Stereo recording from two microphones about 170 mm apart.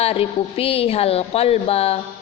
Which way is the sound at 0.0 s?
35° left (ahead or behind).